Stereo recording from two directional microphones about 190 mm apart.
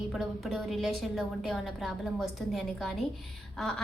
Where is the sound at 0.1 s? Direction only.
Centre (ahead or behind).